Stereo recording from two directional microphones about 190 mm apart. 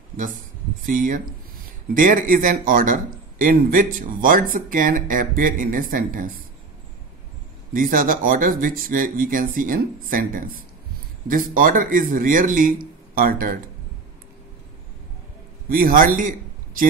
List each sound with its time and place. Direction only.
0.8 s a man's voice: 45° right (ahead or behind)
7.7 s a man's voice: 45° right (ahead or behind)
15.7 s a man's voice: 50° right (ahead or behind)